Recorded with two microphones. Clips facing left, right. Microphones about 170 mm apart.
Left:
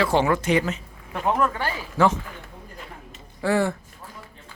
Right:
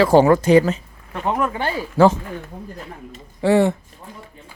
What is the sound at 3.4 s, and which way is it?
Speech, 20° right (ahead or behind).